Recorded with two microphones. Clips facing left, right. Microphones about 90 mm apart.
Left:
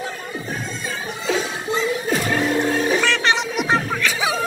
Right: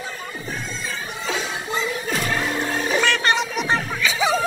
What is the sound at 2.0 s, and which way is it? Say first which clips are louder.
Music: left 3 dB; 20° left (ahead or behind).